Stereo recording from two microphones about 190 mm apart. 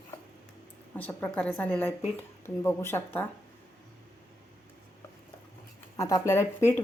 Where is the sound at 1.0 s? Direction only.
10° left (ahead or behind).